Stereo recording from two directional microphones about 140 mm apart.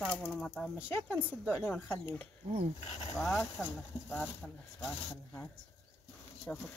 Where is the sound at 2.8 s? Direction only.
45° left (ahead or behind).